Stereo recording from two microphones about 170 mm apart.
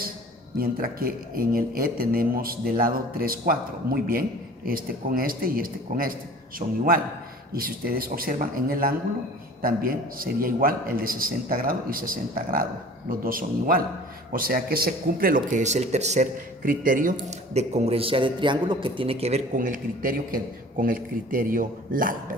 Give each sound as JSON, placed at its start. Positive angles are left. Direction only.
{"t": 0.6, "sound": "speech", "side_deg": -60}
{"t": 15.5, "sound": "a man's voice", "side_deg": -45}
{"t": 17.2, "sound": "a man's voice", "side_deg": -40}
{"t": 19.5, "sound": "a man's voice", "side_deg": -50}